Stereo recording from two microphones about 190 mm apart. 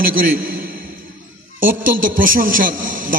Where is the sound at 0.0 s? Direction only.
50° right (ahead or behind).